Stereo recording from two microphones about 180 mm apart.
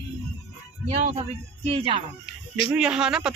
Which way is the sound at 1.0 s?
40° right (ahead or behind).